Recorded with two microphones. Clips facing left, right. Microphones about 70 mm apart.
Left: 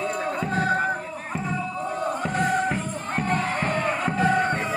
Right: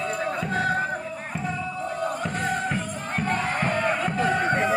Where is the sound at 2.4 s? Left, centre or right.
Centre.